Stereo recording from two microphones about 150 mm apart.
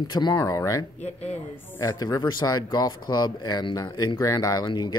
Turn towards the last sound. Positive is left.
turn(degrees=25)  # may be behind; listen again after turning